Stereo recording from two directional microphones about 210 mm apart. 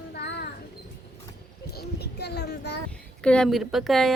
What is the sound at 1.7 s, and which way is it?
Child singing, 50° left (ahead or behind).